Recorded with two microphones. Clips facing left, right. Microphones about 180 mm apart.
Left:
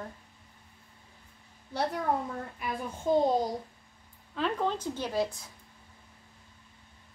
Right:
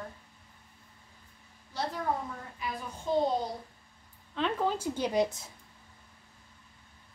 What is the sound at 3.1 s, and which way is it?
Speech, 45° left (ahead or behind).